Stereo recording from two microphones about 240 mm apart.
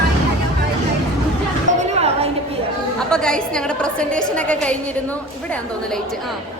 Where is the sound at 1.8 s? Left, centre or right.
Right.